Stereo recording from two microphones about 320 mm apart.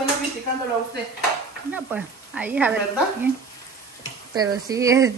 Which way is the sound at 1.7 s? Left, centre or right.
Centre.